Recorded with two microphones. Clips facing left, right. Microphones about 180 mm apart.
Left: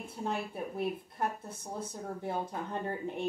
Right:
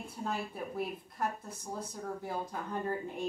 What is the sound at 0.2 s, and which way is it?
Speech, 25° left (ahead or behind).